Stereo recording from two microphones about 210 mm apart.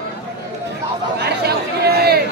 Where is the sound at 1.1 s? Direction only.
50° right (ahead or behind).